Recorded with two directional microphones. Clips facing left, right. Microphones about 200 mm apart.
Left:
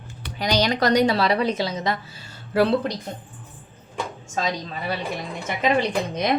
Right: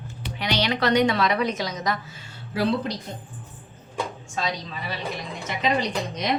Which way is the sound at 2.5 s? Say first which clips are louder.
Left 4 dB; 55° left (ahead or behind).